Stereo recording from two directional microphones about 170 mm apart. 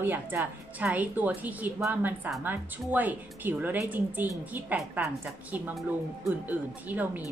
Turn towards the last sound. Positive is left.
turn(degrees=-10)  # may be behind; listen again after turning